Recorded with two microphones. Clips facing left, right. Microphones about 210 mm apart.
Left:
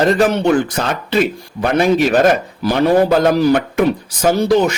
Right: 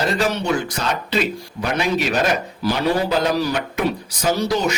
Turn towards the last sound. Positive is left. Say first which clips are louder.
# left 6 dB
turn(degrees=55)  # may be behind; listen again after turning